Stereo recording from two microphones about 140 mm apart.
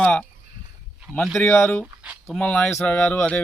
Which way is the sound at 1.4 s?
15° left (ahead or behind).